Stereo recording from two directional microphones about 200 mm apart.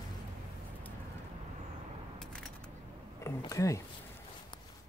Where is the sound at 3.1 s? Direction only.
15° left (ahead or behind).